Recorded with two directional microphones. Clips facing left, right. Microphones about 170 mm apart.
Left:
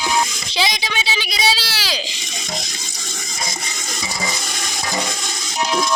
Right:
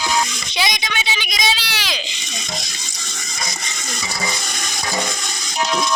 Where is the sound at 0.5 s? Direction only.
30° left (ahead or behind).